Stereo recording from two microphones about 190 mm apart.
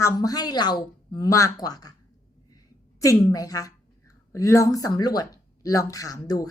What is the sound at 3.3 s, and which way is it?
A woman's voice, 20° left (ahead or behind).